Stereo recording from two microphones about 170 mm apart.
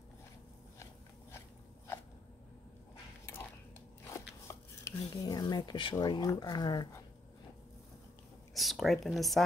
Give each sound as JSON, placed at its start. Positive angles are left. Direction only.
{"t": 4.1, "sound": "speech", "side_deg": 20}
{"t": 8.5, "sound": "speech", "side_deg": 0}